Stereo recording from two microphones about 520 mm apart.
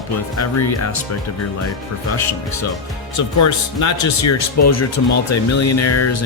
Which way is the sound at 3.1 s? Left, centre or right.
Left.